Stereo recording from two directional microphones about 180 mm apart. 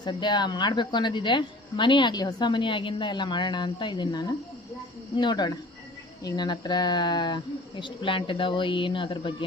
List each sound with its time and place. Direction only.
0.0 s speech: 25° left (ahead or behind)